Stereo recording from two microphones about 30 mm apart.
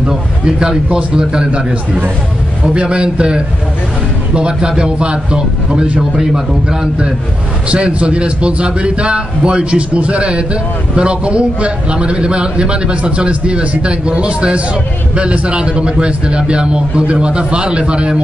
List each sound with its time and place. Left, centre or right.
0.5 s a man's voice: right
2.6 s a man's voice: right
6.1 s a man's voice: centre
7.7 s a man's voice: right